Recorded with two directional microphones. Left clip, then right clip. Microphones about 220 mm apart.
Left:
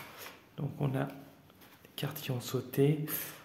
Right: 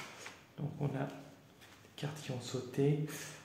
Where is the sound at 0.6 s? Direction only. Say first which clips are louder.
Left 4 dB; 45° left (ahead or behind).